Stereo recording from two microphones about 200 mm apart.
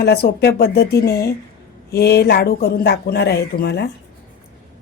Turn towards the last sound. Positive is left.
turn(degrees=55)  # may be behind; listen again after turning